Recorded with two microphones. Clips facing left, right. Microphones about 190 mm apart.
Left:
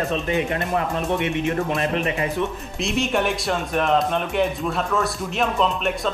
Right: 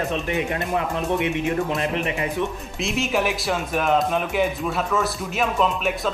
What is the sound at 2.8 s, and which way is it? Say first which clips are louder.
Speech: left 1 dB; centre (ahead or behind).